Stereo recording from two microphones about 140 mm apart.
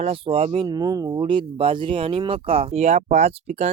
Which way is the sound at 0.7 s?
30° right (ahead or behind).